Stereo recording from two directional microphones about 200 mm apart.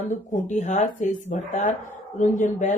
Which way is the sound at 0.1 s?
35° left (ahead or behind).